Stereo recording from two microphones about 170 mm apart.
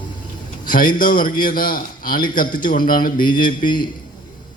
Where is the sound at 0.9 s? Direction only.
55° left (ahead or behind).